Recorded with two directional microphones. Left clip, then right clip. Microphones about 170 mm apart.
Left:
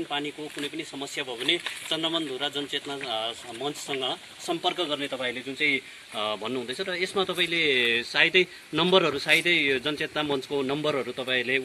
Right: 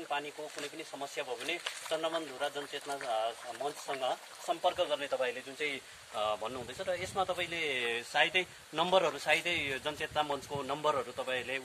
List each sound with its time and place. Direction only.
1.1 s speech: 40° right (ahead or behind)
5.6 s speech: 60° right (ahead or behind)